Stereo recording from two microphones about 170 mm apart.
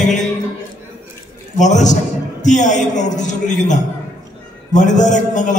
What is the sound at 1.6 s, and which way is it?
A man's voice, 45° left (ahead or behind).